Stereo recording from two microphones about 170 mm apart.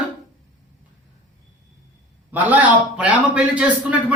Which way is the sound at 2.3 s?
10° right (ahead or behind).